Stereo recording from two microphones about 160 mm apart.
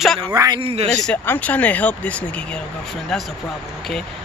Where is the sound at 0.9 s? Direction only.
5° left (ahead or behind).